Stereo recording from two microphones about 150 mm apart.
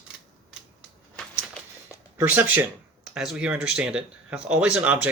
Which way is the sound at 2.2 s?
10° right (ahead or behind).